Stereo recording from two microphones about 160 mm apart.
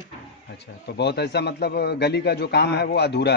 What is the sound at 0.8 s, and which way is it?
A man's voice, 90° left.